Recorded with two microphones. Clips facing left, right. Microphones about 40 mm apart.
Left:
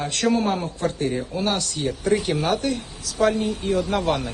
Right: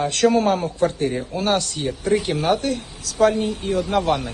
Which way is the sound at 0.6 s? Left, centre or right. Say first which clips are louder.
Right 4 dB; right.